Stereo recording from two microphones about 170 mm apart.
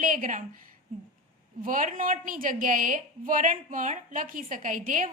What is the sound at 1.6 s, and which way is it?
A woman's voice, 50° right (ahead or behind).